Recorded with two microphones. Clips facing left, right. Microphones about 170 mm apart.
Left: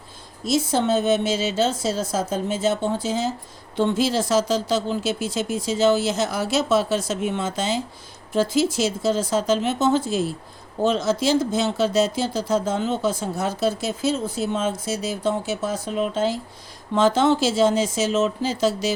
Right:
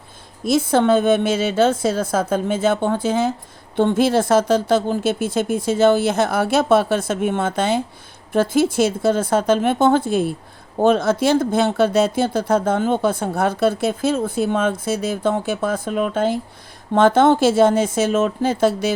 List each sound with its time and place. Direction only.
0.4 s speech: 55° right (ahead or behind)